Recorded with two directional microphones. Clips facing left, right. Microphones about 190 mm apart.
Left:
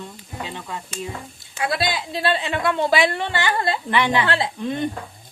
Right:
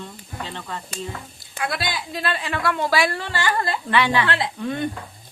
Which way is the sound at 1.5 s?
25° left (ahead or behind).